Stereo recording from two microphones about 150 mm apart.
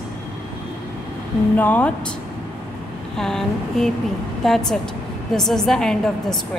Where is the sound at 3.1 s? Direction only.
5° left (ahead or behind).